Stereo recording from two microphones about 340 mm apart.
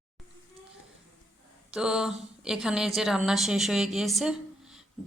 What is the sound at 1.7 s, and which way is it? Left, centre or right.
A woman's voice, centre.